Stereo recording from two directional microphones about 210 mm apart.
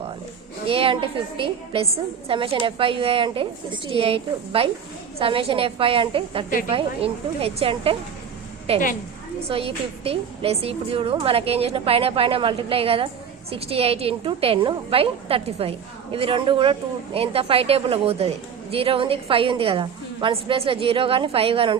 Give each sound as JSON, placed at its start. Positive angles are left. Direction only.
{"t": 0.7, "sound": "a woman's voice", "side_deg": -25}